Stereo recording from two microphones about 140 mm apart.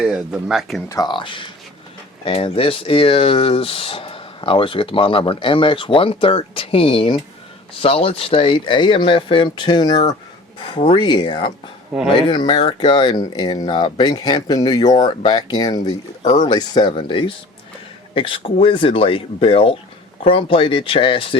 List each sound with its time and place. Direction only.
0.0 s speech: 5° right (ahead or behind)
0.9 s speech: 30° left (ahead or behind)
12.5 s speech: 45° left (ahead or behind)
12.9 s speech: 35° left (ahead or behind)
16.2 s speech: 55° left (ahead or behind)
16.5 s speech: 30° left (ahead or behind)